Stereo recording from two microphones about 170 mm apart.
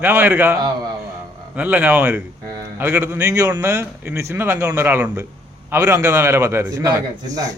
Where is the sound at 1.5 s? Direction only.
10° right (ahead or behind).